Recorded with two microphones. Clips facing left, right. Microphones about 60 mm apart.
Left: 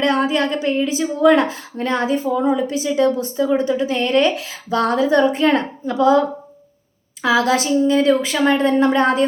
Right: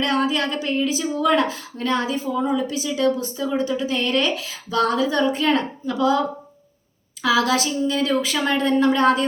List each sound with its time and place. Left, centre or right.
0.0 s a woman's voice: left